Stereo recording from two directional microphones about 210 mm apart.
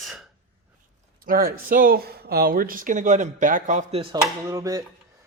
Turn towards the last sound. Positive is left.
turn(degrees=-15)  # may be behind; listen again after turning